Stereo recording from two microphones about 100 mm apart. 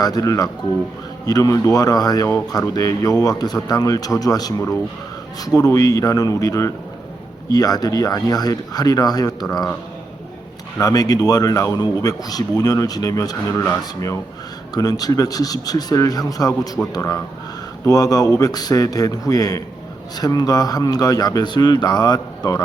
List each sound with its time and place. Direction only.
0.0 s speech: 40° left (ahead or behind)
10.8 s speech: 35° left (ahead or behind)
14.8 s speech: 40° left (ahead or behind)